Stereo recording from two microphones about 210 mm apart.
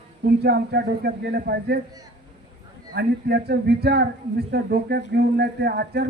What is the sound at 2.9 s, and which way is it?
A man's voice, 50° right (ahead or behind).